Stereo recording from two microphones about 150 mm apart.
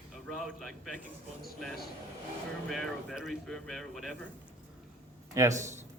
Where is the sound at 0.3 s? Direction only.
Centre (ahead or behind).